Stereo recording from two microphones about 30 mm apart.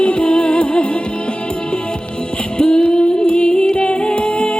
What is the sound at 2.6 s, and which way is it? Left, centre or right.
Female singing, left.